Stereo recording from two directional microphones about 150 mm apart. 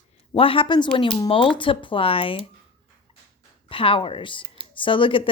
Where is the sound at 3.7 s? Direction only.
35° left (ahead or behind).